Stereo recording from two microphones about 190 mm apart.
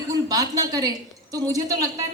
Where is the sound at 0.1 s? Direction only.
20° right (ahead or behind).